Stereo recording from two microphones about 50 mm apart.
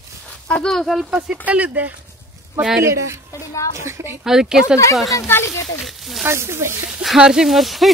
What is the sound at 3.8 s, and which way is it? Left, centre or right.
Speech, right.